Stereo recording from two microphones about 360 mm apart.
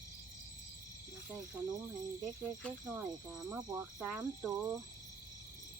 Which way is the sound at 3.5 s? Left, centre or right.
Centre.